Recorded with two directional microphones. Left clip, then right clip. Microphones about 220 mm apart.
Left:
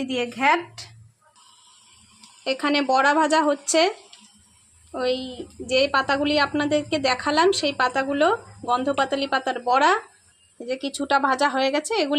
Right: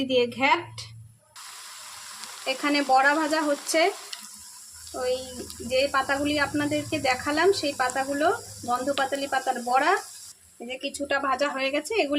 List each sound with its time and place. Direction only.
0.1 s a woman's voice: 10° left (ahead or behind)
2.4 s a woman's voice: 15° left (ahead or behind)
4.9 s a woman's voice: 20° left (ahead or behind)